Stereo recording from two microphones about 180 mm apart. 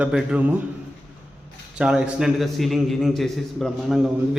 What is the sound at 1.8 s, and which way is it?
A man's voice, 5° right (ahead or behind).